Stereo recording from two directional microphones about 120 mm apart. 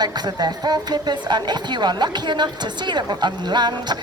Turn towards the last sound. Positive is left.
turn(degrees=-35)  # may be behind; listen again after turning